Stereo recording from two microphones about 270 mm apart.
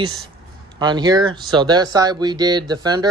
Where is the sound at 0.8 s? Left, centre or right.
Centre.